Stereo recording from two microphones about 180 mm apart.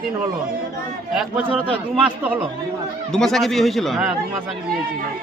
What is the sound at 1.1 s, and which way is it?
Speech, 5° right (ahead or behind).